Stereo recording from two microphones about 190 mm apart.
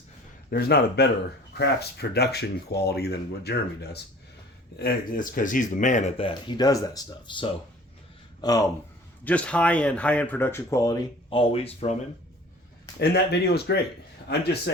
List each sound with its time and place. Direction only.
0.5 s speech: 55° left (ahead or behind); by 8.6 s 20° left (ahead or behind)
9.2 s speech: 5° left (ahead or behind); by 11.9 s 30° left (ahead or behind)
13.0 s speech: 60° left (ahead or behind)